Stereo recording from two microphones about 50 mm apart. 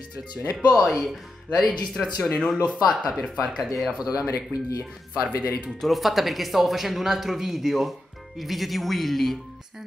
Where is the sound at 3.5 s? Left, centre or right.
Centre.